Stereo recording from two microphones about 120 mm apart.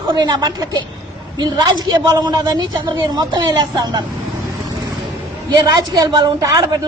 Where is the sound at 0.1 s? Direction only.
35° right (ahead or behind).